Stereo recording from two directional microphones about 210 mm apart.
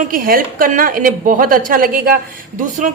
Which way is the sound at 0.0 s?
40° right (ahead or behind).